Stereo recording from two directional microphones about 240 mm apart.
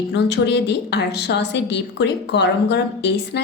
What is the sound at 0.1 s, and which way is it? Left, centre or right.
A woman's voice, left.